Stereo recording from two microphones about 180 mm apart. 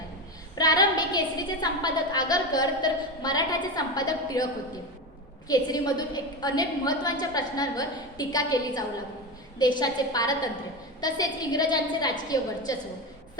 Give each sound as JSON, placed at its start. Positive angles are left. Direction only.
{"t": 0.5, "sound": "a sound", "side_deg": 20}
{"t": 1.6, "sound": "a woman's voice", "side_deg": 20}
{"t": 5.5, "sound": "a woman's voice", "side_deg": 20}